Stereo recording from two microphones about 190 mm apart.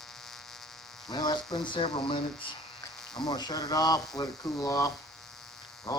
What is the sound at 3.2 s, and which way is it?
Speech, 20° left (ahead or behind).